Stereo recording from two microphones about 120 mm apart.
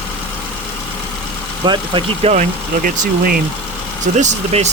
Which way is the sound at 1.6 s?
40° right (ahead or behind).